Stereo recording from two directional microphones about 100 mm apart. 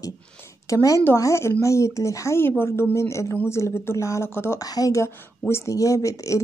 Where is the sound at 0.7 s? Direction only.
30° left (ahead or behind).